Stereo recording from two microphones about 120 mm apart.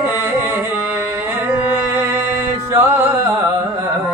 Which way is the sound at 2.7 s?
20° right (ahead or behind).